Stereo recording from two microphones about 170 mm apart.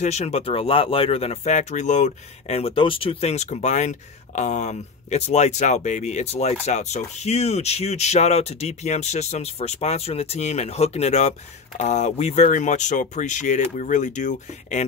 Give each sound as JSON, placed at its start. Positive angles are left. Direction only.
{"t": 0.0, "sound": "speech", "side_deg": 40}